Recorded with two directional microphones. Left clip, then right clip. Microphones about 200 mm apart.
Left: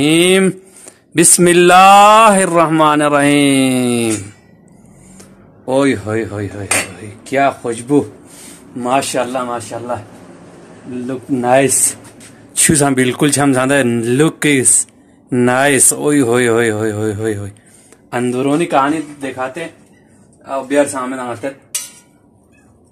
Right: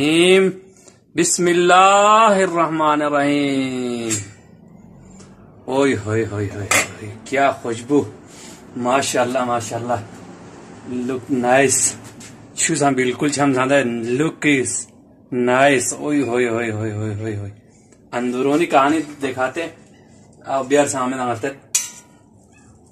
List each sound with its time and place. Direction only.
0.0 s speech: 45° left (ahead or behind)
5.7 s speech: 40° left (ahead or behind)
9.4 s a man's voice: 25° left (ahead or behind)
11.1 s speech: 35° left (ahead or behind)
12.6 s speech: 50° left (ahead or behind)
20.6 s a man's voice: 25° left (ahead or behind)